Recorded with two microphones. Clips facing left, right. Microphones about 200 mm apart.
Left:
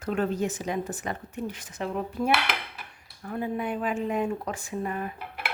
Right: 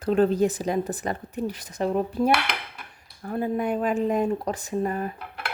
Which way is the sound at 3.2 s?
40° right (ahead or behind).